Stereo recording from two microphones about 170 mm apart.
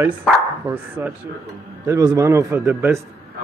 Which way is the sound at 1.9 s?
20° right (ahead or behind).